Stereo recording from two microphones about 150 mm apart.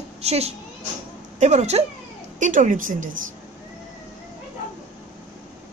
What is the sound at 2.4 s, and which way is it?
Speech, 60° right (ahead or behind).